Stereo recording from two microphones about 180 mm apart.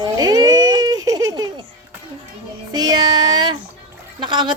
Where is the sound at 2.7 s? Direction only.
20° right (ahead or behind).